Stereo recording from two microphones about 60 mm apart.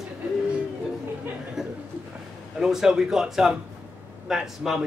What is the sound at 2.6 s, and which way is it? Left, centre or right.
A man's voice, centre.